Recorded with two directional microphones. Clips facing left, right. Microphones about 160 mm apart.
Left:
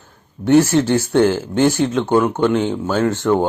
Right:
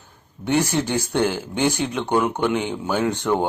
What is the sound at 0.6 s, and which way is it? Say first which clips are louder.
Speech: left 7 dB; 15° right (ahead or behind).